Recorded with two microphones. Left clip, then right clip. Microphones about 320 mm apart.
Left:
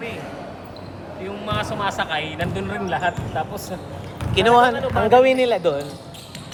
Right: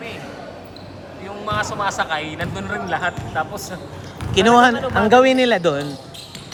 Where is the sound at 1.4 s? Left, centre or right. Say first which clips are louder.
Right 3 dB; centre; by 5.8 s right.